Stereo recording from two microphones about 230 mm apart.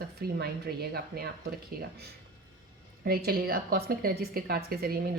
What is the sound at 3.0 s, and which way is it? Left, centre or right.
Speech, right.